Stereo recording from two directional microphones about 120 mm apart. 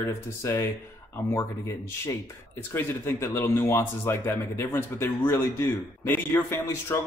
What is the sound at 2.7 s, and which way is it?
A man's voice, 20° left (ahead or behind).